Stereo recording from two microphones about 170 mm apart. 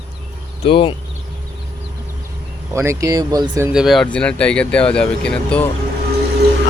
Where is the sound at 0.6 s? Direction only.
30° left (ahead or behind).